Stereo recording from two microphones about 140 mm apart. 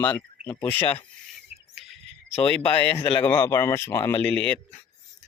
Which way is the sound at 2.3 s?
10° left (ahead or behind).